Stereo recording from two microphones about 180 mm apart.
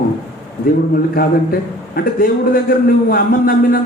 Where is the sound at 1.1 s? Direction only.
55° left (ahead or behind).